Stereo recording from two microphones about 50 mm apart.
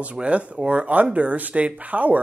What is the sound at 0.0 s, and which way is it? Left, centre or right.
Speech, right.